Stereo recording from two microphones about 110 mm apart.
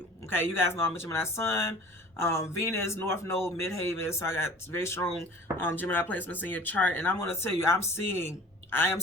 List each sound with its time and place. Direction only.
0.3 s a man's voice: 20° left (ahead or behind)